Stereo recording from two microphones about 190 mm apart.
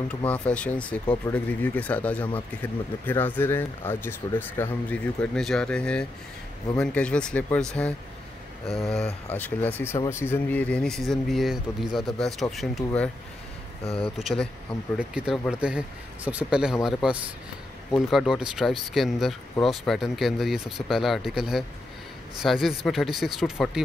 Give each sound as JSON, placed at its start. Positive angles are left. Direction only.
{"t": 0.3, "sound": "speech", "side_deg": 5}
{"t": 13.8, "sound": "speech", "side_deg": 30}
{"t": 14.1, "sound": "speech", "side_deg": 0}